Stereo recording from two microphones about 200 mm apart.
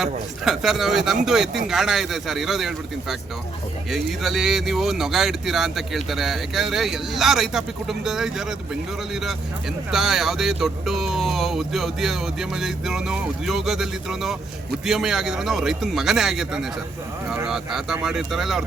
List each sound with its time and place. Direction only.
0.0 s speech: centre (ahead or behind)